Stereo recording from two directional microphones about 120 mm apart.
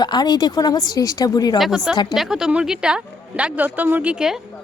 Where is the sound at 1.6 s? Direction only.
Centre (ahead or behind).